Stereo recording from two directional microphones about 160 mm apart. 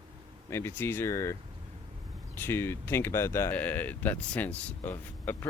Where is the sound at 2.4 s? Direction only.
15° left (ahead or behind).